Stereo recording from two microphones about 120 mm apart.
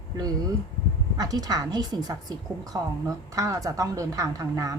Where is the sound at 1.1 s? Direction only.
30° right (ahead or behind).